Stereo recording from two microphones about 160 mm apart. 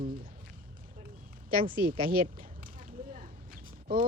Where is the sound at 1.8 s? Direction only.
65° right (ahead or behind).